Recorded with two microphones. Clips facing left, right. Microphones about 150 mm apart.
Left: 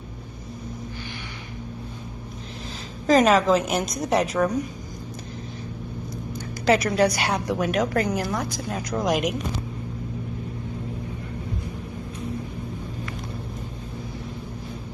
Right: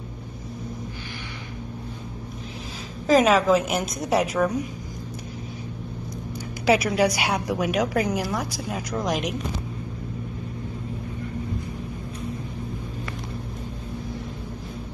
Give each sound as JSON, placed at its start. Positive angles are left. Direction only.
{"t": 3.1, "sound": "a woman's voice", "side_deg": -5}
{"t": 6.6, "sound": "a woman's voice", "side_deg": -10}